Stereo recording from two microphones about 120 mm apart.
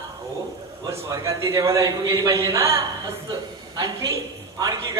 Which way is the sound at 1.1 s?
25° right (ahead or behind).